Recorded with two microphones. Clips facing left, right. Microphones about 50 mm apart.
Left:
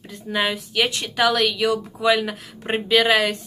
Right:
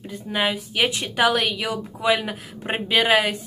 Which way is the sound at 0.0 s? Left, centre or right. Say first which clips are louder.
Even; centre.